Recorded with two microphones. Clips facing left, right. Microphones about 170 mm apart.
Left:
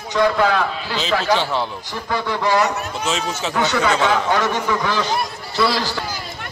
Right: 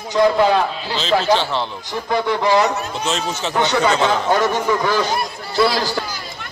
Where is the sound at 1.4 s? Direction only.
10° left (ahead or behind).